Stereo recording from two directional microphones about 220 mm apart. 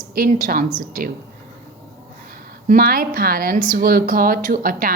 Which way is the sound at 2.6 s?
40° right (ahead or behind).